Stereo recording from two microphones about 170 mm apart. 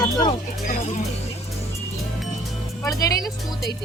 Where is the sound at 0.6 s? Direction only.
50° left (ahead or behind).